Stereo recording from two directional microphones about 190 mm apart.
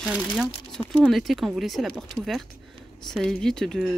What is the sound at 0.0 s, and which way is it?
Speech, 5° right (ahead or behind).